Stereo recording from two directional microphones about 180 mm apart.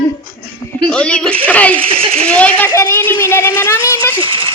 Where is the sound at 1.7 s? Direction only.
30° right (ahead or behind).